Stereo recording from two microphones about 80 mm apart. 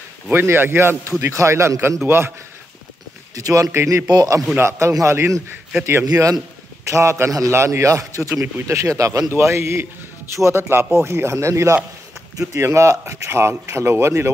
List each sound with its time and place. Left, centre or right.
0.3 s a man's voice: right
3.3 s a man's voice: right
4.1 s a man's voice: right
4.6 s a man's voice: right
6.0 s a man's voice: right